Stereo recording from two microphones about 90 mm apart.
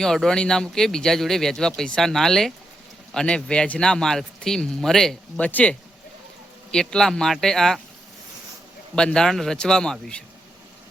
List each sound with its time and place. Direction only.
0.0 s speech: 5° left (ahead or behind)
5.5 s speech: 15° left (ahead or behind)
6.7 s speech: 5° left (ahead or behind)
9.0 s speech: 10° left (ahead or behind)